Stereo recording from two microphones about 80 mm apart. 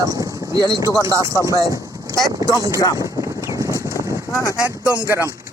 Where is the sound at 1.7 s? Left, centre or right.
Right.